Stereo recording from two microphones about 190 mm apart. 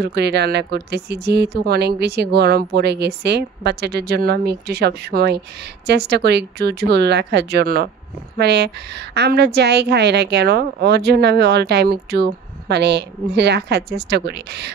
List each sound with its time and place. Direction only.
0.0 s a woman's voice: 60° right (ahead or behind)